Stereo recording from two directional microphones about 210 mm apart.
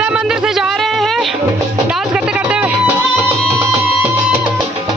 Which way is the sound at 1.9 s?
5° right (ahead or behind).